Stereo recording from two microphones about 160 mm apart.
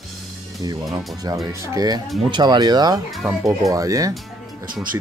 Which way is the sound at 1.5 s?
20° right (ahead or behind).